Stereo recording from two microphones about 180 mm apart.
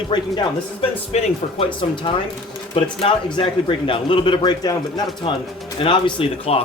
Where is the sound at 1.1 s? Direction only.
35° left (ahead or behind).